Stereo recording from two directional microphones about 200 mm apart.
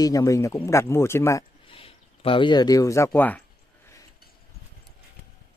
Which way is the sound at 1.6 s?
30° left (ahead or behind).